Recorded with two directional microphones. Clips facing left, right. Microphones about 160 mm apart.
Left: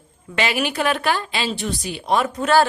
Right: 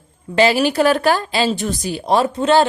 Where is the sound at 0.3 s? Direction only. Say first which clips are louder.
Right 8 dB; 35° right (ahead or behind).